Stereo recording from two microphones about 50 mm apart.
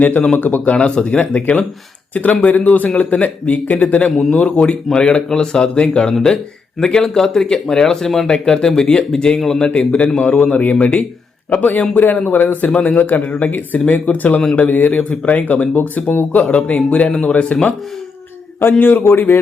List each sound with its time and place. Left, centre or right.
0.0 s speech: left
0.7 s speech: centre
10.3 s speech: left
11.5 s speech: left
17.1 s speech: centre
17.3 s speech: left
18.6 s a man's voice: left